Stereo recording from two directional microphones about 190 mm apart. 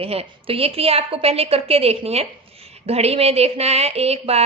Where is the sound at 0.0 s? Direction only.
30° right (ahead or behind).